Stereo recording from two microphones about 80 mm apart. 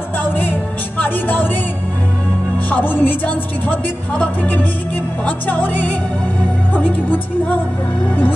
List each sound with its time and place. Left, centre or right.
0.2 s music: left
2.7 s speech: left